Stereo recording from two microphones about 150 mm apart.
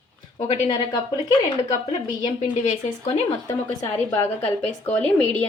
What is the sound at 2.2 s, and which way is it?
A woman's voice, 45° left (ahead or behind).